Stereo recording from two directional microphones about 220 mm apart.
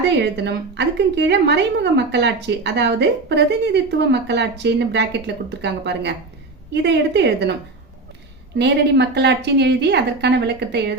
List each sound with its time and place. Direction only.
0.2 s a woman's voice: 50° right (ahead or behind)
8.5 s a woman's voice: 50° right (ahead or behind)